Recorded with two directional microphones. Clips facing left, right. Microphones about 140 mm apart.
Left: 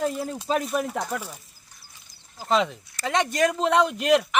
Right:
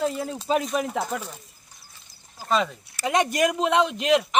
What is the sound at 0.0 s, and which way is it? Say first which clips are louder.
Speech: even; 5° left (ahead or behind).